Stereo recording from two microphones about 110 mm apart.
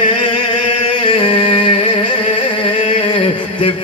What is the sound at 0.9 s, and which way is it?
Music, 50° left (ahead or behind).